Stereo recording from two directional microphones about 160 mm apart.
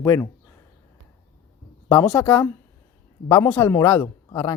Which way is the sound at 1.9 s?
15° left (ahead or behind).